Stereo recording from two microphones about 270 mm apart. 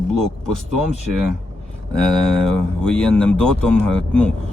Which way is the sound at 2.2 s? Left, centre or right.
Centre.